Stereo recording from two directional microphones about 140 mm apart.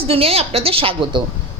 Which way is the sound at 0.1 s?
45° right (ahead or behind).